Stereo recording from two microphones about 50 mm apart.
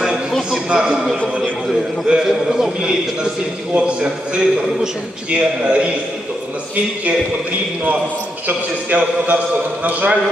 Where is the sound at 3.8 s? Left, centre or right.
Right.